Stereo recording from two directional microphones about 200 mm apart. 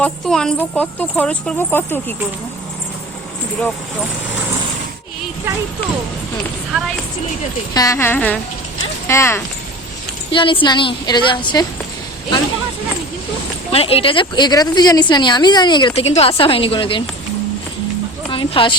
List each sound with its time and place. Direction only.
0.0 s speech: 5° left (ahead or behind)
7.7 s speech: 20° left (ahead or behind)
10.3 s a woman's voice: 25° left (ahead or behind)
13.7 s a woman's voice: 30° left (ahead or behind)
18.3 s a sound: 25° left (ahead or behind)